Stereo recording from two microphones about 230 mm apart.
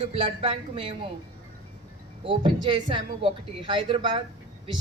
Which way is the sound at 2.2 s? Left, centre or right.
Centre.